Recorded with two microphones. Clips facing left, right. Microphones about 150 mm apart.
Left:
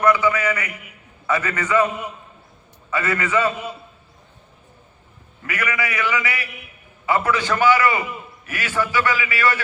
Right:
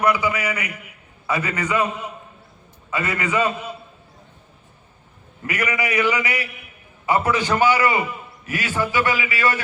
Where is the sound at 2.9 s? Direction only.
15° right (ahead or behind).